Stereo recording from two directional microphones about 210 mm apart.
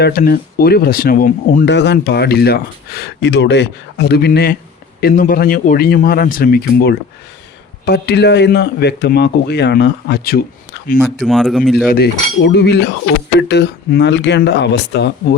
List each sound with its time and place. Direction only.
0.0 s speech: 45° left (ahead or behind)
10.9 s speech: 5° right (ahead or behind)
11.9 s speech: 50° left (ahead or behind)